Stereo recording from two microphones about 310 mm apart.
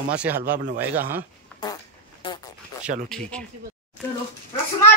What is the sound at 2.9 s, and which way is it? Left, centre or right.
Speech, right.